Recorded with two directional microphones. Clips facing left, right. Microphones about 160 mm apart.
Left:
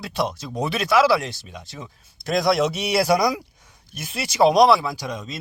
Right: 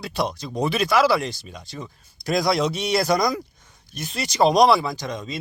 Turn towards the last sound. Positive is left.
turn(degrees=5)  # may be behind; listen again after turning